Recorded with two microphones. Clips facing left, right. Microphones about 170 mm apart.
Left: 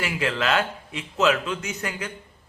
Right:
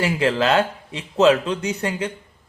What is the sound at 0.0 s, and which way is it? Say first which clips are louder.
Speech: right 6 dB; 35° right (ahead or behind).